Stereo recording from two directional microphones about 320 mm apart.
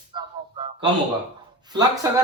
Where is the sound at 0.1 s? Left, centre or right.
Centre.